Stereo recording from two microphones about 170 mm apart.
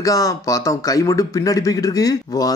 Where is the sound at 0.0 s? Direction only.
20° left (ahead or behind).